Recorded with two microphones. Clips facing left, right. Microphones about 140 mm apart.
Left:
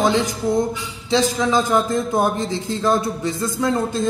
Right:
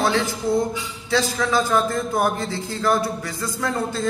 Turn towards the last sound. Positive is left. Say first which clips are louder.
# left 4 dB
turn(degrees=20)  # may be behind; listen again after turning